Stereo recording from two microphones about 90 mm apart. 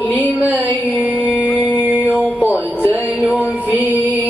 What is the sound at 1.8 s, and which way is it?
Mantra, 20° right (ahead or behind).